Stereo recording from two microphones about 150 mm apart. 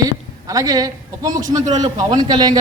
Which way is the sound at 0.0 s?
25° right (ahead or behind).